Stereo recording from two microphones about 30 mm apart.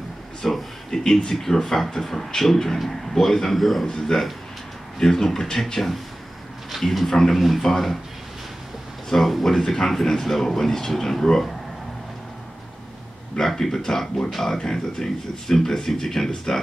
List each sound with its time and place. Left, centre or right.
0.4 s a sound: centre
0.9 s a sound: left
1.3 s speech: centre
3.9 s speech: centre
6.8 s speech: centre
7.1 s speech: centre
7.3 s speech: centre
7.6 s speech: centre
9.1 s speech: centre
13.6 s speech: centre